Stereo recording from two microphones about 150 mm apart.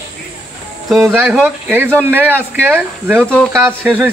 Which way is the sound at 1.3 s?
10° right (ahead or behind).